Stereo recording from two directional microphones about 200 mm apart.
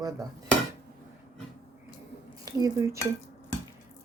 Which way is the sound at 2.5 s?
20° right (ahead or behind).